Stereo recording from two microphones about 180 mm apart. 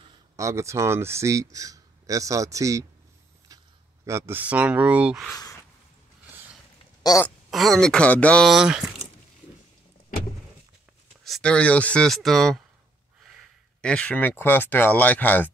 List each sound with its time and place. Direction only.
0.4 s speech: 15° right (ahead or behind)
4.0 s speech: 15° right (ahead or behind)
5.3 s a sound: 15° left (ahead or behind)
7.0 s a sound: 20° left (ahead or behind)
7.2 s speech: centre (ahead or behind)
11.2 s speech: 5° left (ahead or behind)
13.7 s speech: 5° left (ahead or behind)